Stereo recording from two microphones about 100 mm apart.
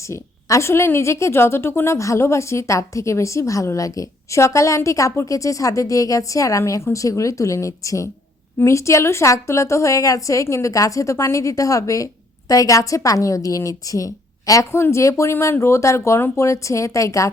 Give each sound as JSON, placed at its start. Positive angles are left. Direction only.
{"t": 0.1, "sound": "a woman's voice", "side_deg": 30}